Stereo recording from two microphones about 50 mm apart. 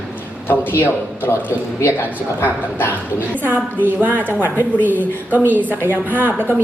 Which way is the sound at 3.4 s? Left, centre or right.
Right.